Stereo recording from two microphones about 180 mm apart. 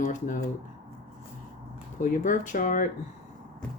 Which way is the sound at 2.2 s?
45° left (ahead or behind).